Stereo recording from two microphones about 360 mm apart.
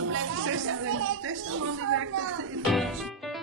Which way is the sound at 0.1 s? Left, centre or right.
Right.